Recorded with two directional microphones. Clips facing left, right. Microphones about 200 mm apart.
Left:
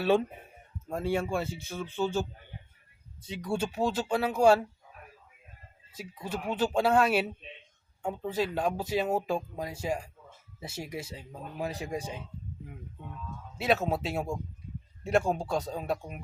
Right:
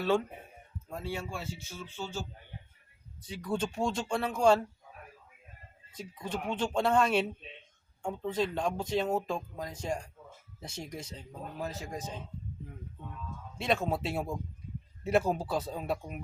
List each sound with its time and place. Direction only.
0.9 s speech: 55° left (ahead or behind)
3.2 s speech: 20° left (ahead or behind)
5.9 s speech: 5° left (ahead or behind)
13.6 s speech: 5° left (ahead or behind)